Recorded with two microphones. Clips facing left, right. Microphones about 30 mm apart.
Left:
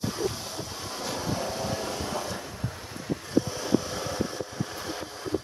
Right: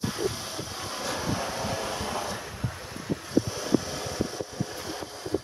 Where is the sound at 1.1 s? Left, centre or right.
Right.